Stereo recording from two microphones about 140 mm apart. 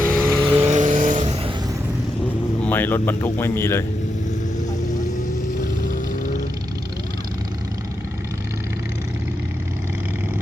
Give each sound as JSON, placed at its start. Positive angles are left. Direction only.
{"t": 0.1, "sound": "vehicle", "side_deg": 10}
{"t": 0.6, "sound": "vehicle", "side_deg": -60}
{"t": 2.6, "sound": "speech", "side_deg": 10}